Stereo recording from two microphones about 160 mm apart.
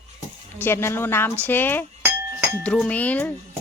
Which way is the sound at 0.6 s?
15° left (ahead or behind).